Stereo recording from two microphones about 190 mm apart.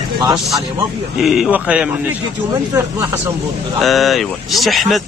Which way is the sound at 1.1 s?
Centre (ahead or behind).